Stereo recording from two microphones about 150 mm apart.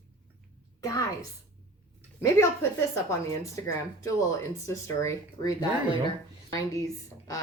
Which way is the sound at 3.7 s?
20° left (ahead or behind).